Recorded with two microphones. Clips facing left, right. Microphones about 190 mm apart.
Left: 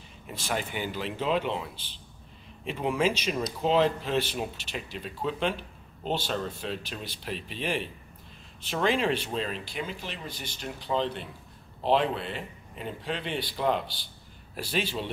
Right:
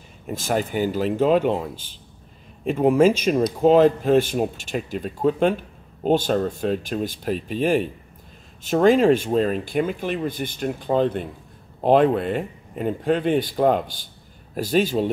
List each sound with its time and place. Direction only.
0.3 s speech: 45° right (ahead or behind)